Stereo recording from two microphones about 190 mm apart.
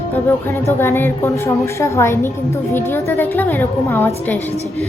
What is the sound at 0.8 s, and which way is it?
A woman's voice, 10° left (ahead or behind).